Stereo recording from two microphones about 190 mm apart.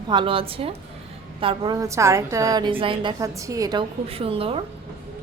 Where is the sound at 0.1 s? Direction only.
25° right (ahead or behind).